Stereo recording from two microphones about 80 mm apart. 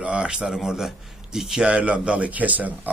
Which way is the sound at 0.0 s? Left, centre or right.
Centre.